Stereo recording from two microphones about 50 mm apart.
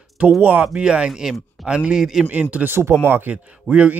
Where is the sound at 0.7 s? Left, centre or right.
Centre.